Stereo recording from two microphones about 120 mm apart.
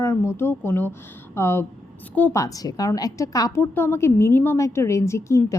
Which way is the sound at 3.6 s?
20° left (ahead or behind).